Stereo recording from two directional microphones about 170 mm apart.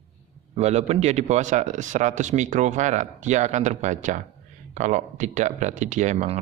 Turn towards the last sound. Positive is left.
turn(degrees=-45)  # may be behind; listen again after turning